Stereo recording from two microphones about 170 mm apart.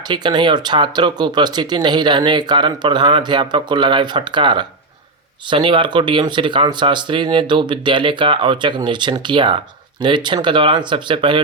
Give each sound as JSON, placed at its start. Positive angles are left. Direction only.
{"t": 0.1, "sound": "speech", "side_deg": -25}